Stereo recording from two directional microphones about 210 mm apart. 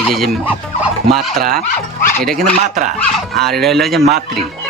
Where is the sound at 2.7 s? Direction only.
35° right (ahead or behind).